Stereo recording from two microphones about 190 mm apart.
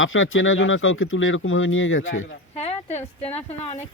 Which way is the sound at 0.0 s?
90° left.